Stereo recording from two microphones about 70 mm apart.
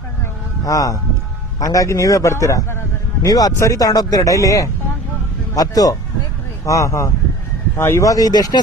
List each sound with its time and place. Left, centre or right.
0.6 s a man's voice: left
3.2 s speech: left
6.7 s a man's voice: left
8.3 s speech: left